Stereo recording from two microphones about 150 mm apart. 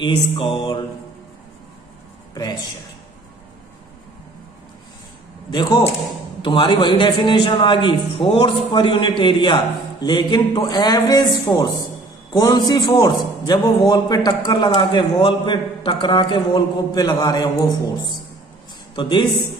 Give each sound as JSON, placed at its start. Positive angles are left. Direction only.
{"t": 0.0, "sound": "a man's voice", "side_deg": 35}
{"t": 5.5, "sound": "a man's voice", "side_deg": 25}
{"t": 18.9, "sound": "a man's voice", "side_deg": 30}